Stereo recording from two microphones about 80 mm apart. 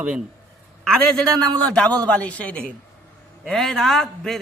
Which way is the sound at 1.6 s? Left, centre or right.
Centre.